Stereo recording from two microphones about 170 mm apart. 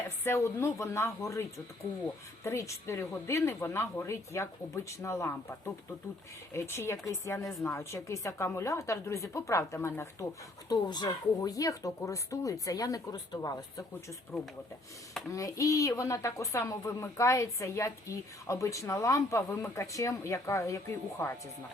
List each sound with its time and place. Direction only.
0.3 s a woman's voice: 15° left (ahead or behind)
15.3 s speech: 20° left (ahead or behind)